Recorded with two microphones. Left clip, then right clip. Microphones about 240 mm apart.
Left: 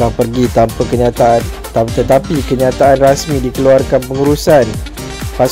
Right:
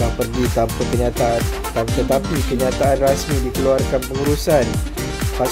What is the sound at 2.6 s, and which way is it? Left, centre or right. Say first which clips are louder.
Speech: left 8 dB; left.